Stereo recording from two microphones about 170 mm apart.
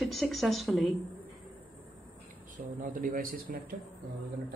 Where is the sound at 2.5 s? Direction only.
50° right (ahead or behind).